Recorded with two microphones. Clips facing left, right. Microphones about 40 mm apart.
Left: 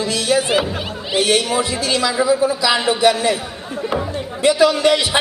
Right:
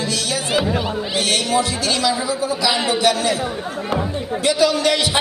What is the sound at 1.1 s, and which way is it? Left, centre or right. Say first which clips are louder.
Speech: left 3 dB; left.